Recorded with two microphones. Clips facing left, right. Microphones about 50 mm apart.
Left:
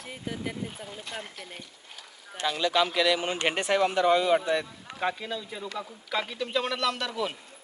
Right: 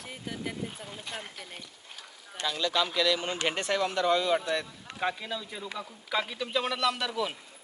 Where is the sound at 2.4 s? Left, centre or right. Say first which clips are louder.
Left 4 dB; left.